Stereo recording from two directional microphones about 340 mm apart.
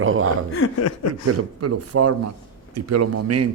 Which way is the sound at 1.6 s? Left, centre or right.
Right.